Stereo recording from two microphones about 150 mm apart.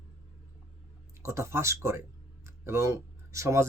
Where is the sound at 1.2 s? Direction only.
20° right (ahead or behind).